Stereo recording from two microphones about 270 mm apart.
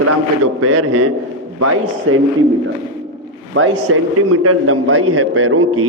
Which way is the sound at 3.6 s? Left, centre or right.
Right.